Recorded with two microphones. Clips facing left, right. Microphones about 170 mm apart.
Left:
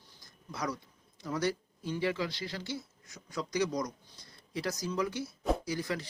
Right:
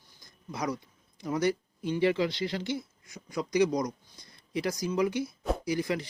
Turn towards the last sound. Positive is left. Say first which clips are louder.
# right 5 dB
turn(degrees=-15)  # may be behind; listen again after turning